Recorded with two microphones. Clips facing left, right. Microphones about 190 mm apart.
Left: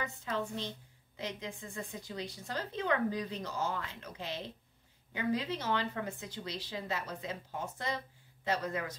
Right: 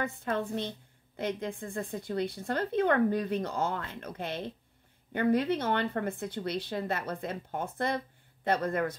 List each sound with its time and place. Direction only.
0.0 s a woman's voice: 55° right (ahead or behind)